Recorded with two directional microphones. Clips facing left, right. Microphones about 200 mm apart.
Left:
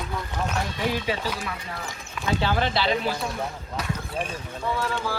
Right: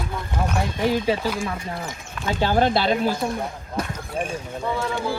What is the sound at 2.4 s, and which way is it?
Speech, 45° right (ahead or behind).